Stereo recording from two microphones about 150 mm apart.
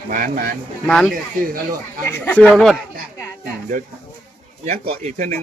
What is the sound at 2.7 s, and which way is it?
Speech, 20° left (ahead or behind).